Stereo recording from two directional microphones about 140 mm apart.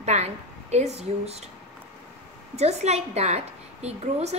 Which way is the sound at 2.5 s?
50° right (ahead or behind).